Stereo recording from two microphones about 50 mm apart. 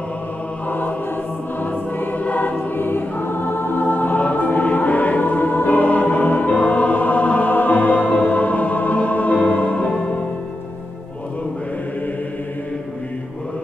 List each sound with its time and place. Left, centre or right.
0.7 s music: left
1.6 s choir: left
2.9 s choir: left